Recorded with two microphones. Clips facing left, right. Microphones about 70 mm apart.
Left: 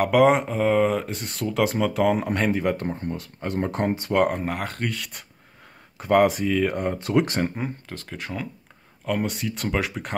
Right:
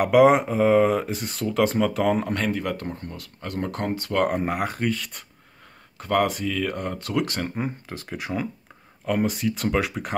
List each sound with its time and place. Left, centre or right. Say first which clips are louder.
0.0 s speech: right 2 dB; centre
2.3 s speech: left 3 dB; centre
4.3 s speech: right 3 dB; centre
5.9 s speech: left 4 dB; centre
7.5 s speech: right 1 dB; centre